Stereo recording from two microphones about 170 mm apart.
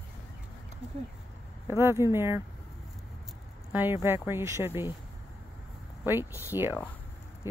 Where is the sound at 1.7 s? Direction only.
15° right (ahead or behind).